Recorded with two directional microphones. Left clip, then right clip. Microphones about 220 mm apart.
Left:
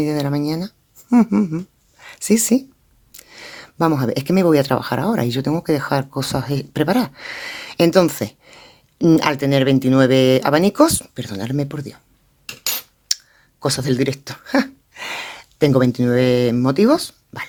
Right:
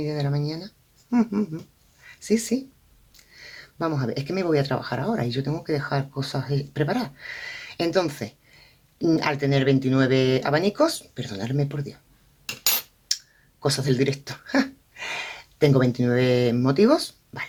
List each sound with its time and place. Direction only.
0.0 s speech: 50° left (ahead or behind)
13.1 s clicking: 50° left (ahead or behind)
13.6 s speech: 50° left (ahead or behind)